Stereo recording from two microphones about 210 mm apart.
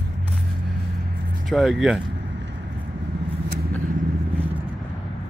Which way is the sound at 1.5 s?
Centre (ahead or behind).